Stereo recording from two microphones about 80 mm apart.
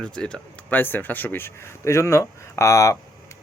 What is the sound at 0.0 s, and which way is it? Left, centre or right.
Speech, centre.